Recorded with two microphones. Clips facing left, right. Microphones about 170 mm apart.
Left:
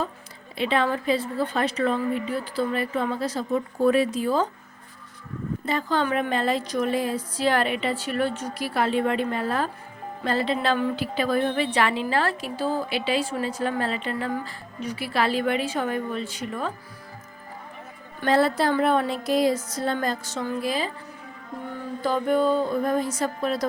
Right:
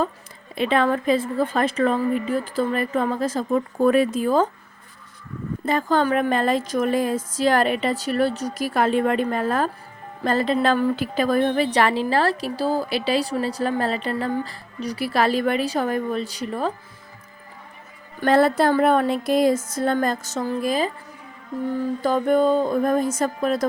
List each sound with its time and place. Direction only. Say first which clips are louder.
0.5 s a woman's voice: right 4 dB; 50° right (ahead or behind)
5.6 s a woman's voice: right 5 dB; 50° right (ahead or behind)
18.2 s a woman's voice: right 4 dB; 50° right (ahead or behind)
22.0 s a woman's voice: right 3 dB; 45° right (ahead or behind)